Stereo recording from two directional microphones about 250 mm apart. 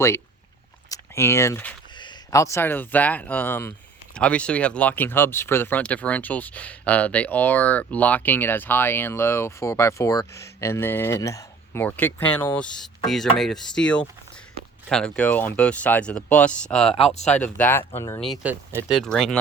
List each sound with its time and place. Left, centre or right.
0.9 s speech: centre
18.2 s speech: centre